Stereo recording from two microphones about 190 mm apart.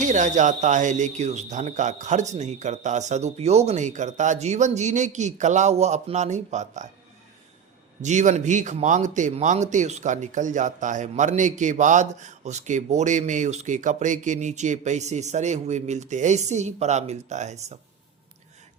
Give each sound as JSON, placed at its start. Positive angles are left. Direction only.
{"t": 0.0, "sound": "a man's voice", "side_deg": -40}
{"t": 8.0, "sound": "a man's voice", "side_deg": -40}